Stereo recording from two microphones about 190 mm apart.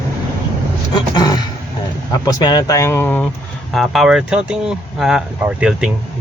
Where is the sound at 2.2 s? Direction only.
20° left (ahead or behind).